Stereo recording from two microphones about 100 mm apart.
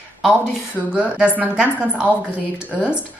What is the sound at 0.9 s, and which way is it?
Speech, 10° right (ahead or behind).